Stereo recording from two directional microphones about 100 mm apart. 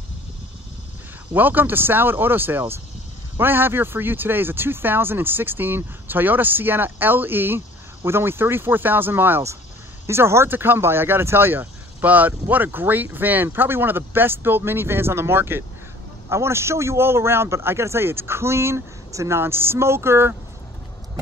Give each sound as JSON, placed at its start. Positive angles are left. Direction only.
{"t": 1.3, "sound": "speech", "side_deg": -20}